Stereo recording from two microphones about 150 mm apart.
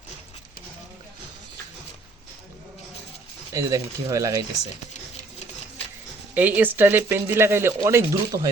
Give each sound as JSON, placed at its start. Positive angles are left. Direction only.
{"t": 3.5, "sound": "speech", "side_deg": -20}
{"t": 6.3, "sound": "speech", "side_deg": -10}